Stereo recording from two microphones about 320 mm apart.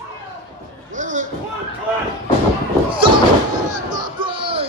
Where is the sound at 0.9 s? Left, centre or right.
Right.